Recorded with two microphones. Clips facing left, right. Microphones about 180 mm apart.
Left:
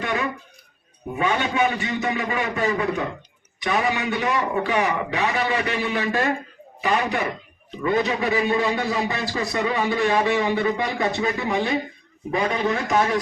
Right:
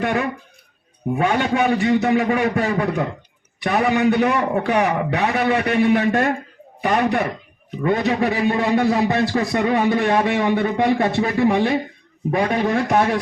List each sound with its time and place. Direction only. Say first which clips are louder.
0.0 s a man's voice: right 4 dB; 55° right (ahead or behind)